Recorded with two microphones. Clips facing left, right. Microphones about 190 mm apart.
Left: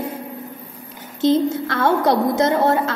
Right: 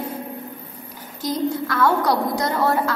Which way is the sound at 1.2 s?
25° left (ahead or behind).